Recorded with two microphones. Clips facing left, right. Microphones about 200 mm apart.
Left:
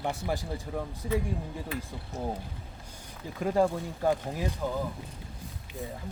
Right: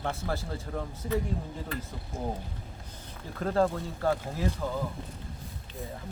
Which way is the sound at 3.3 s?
10° left (ahead or behind).